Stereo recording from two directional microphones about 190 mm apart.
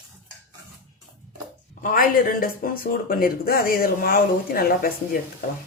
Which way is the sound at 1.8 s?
45° left (ahead or behind).